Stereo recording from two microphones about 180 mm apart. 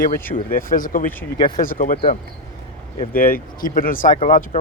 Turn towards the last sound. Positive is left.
turn(degrees=45)  # may be behind; listen again after turning